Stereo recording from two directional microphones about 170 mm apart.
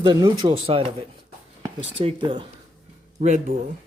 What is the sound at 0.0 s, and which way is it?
Speech, 30° right (ahead or behind).